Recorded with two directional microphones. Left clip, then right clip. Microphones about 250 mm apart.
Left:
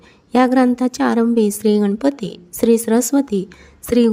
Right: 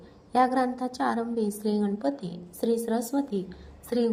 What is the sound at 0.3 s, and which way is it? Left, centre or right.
Speech, left.